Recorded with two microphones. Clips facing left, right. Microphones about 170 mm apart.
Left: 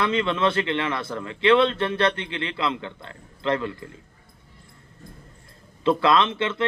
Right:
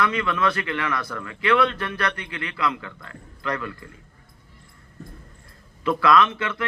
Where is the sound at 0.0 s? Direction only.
25° left (ahead or behind).